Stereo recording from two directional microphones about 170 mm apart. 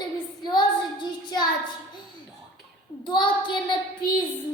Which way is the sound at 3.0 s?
25° left (ahead or behind).